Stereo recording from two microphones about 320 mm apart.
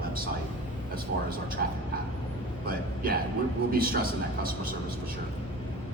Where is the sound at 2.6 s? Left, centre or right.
Right.